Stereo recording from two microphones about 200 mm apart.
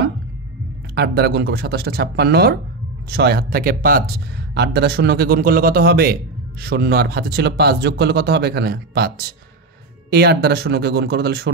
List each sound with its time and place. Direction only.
0.9 s speech: 55° right (ahead or behind)